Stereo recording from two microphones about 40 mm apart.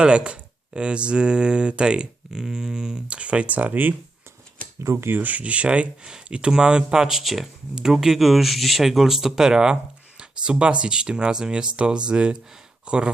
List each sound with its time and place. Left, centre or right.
0.0 s speech: right
3.1 s speech: right
5.1 s speech: right; by 7.2 s centre
7.2 s speech: centre; by 13.1 s right